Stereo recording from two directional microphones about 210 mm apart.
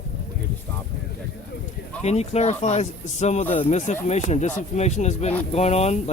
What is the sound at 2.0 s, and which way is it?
Speech, 30° left (ahead or behind).